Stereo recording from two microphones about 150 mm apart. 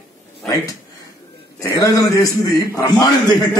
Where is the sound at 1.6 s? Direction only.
25° left (ahead or behind).